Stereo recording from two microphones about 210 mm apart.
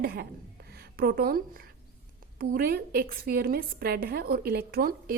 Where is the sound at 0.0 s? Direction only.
45° right (ahead or behind).